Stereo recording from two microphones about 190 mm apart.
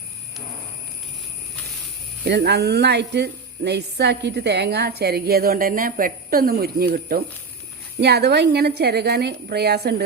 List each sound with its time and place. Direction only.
2.2 s speech: 60° right (ahead or behind)